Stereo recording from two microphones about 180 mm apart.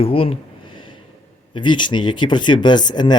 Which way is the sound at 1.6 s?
25° left (ahead or behind).